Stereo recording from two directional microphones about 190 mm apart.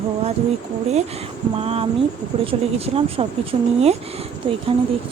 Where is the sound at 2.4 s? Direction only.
30° right (ahead or behind).